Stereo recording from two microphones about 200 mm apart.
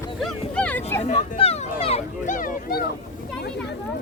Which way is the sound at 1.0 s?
35° left (ahead or behind).